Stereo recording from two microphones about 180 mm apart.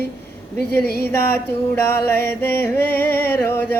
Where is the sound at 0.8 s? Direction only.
60° left (ahead or behind).